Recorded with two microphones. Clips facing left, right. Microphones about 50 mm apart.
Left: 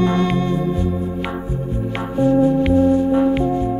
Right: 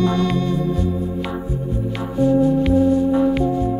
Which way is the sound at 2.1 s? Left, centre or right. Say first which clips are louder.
Left 1 dB; left.